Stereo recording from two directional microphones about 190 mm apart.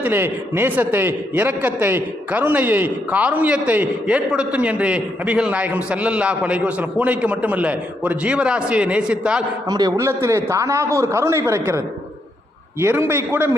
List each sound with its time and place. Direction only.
0.0 s a man's voice: 10° right (ahead or behind)
9.6 s a man's voice: 20° right (ahead or behind)
12.8 s a man's voice: 15° right (ahead or behind)